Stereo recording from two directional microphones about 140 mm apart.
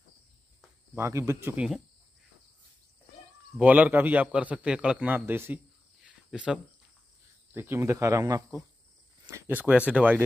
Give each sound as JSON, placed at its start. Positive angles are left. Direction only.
{"t": 0.9, "sound": "a man's voice", "side_deg": -20}
{"t": 3.5, "sound": "a man's voice", "side_deg": -10}
{"t": 9.3, "sound": "a man's voice", "side_deg": -10}